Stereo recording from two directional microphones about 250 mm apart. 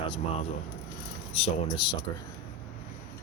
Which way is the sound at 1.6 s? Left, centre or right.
Centre.